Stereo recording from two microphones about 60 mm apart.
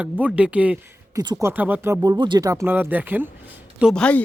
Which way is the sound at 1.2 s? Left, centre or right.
Right.